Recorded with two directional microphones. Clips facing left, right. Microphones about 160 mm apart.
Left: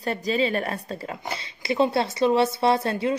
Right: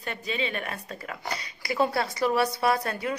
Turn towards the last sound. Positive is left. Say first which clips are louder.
# left 4 dB
turn(degrees=25)  # may be behind; listen again after turning